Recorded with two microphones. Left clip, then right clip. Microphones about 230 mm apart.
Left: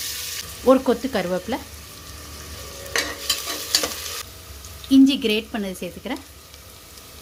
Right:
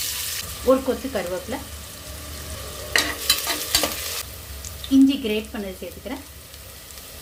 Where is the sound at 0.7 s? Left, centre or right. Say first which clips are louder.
Left 3 dB; left.